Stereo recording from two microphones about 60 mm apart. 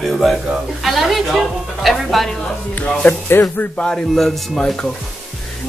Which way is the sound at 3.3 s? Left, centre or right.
Left.